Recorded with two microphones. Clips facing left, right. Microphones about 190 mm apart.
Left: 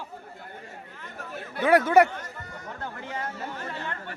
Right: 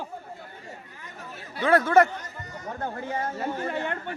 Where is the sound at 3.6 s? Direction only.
55° right (ahead or behind).